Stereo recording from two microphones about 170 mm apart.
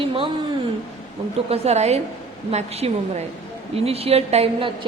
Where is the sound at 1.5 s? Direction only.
40° right (ahead or behind).